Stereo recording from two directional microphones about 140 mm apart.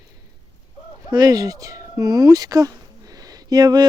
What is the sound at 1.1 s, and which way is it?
Speech, 30° right (ahead or behind).